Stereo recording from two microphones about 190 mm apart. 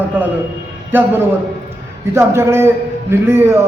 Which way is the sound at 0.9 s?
10° right (ahead or behind).